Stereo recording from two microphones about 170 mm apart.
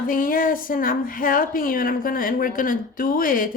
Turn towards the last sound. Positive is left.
turn(degrees=55)  # may be behind; listen again after turning